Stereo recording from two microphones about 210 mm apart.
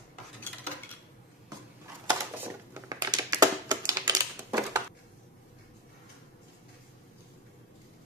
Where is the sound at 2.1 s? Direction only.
20° right (ahead or behind).